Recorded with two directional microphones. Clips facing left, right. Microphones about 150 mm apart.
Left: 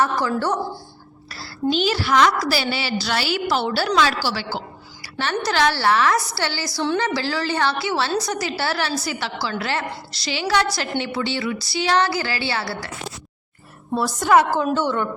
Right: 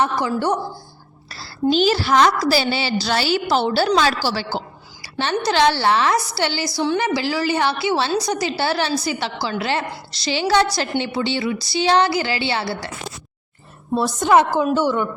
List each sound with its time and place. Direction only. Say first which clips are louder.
0.0 s a woman's voice: right 1 dB; 15° right (ahead or behind)
1.7 s a woman's voice: right 3 dB; 35° right (ahead or behind)
5.0 s a sound: right 3 dB; 20° right (ahead or behind)
5.5 s a woman's voice: right 2 dB; 20° right (ahead or behind)
13.9 s a woman's voice: right 1 dB; 20° right (ahead or behind)